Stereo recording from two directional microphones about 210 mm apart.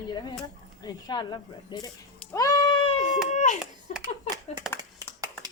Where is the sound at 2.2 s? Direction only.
15° left (ahead or behind).